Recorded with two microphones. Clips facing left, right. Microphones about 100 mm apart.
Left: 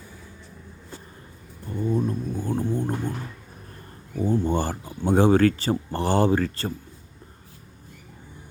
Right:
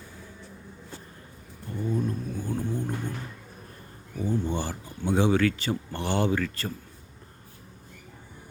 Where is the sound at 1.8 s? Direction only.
25° left (ahead or behind).